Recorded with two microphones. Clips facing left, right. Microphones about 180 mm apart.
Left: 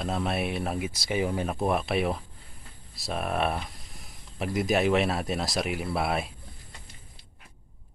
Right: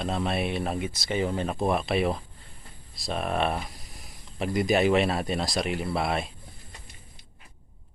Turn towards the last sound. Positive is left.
turn(degrees=5)  # may be behind; listen again after turning